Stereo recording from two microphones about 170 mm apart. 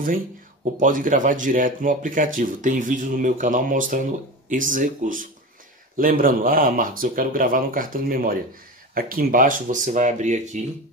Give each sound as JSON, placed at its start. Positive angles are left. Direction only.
{"t": 0.7, "sound": "speech", "side_deg": -50}